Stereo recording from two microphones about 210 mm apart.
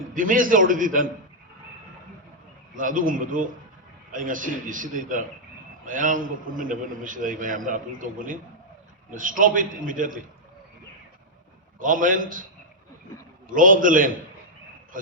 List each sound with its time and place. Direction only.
0.1 s a man's voice: 40° right (ahead or behind)
2.7 s a man's voice: 40° right (ahead or behind)
11.8 s a man's voice: 40° right (ahead or behind)
13.5 s a man's voice: 40° right (ahead or behind)